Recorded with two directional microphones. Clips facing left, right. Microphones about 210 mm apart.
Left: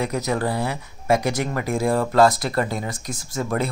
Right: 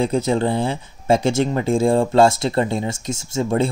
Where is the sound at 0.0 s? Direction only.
30° right (ahead or behind).